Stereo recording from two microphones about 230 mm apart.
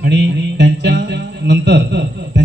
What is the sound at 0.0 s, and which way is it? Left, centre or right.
Music, right.